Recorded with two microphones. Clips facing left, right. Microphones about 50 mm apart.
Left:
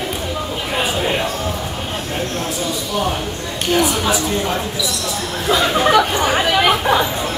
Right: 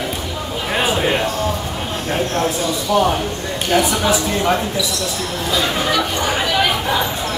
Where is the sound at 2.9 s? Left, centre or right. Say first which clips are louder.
Right 7 dB; right.